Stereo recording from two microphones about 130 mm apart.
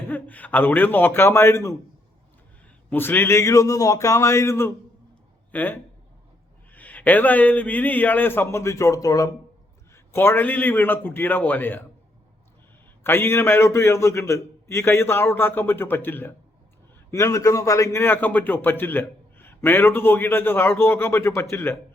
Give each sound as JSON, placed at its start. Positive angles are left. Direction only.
{"t": 0.1, "sound": "a man's voice", "side_deg": 10}
{"t": 2.9, "sound": "a man's voice", "side_deg": 15}
{"t": 13.0, "sound": "a man's voice", "side_deg": 20}